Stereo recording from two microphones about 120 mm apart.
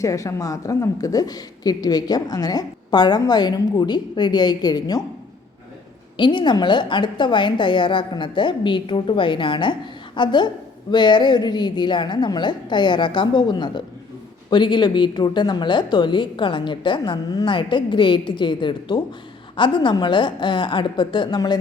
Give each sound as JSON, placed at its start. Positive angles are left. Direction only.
{"t": 0.0, "sound": "a woman's voice", "side_deg": 25}
{"t": 6.1, "sound": "a woman's voice", "side_deg": 40}